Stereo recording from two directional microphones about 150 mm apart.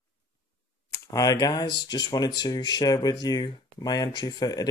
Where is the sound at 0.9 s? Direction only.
20° left (ahead or behind).